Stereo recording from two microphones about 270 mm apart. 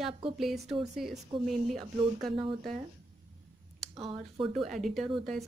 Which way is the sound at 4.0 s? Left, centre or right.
Centre.